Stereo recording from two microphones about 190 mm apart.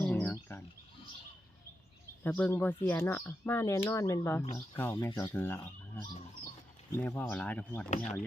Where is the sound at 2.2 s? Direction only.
10° left (ahead or behind).